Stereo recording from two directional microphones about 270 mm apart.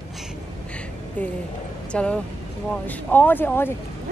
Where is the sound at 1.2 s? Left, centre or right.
Centre.